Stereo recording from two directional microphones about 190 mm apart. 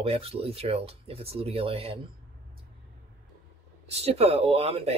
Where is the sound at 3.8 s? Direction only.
35° right (ahead or behind).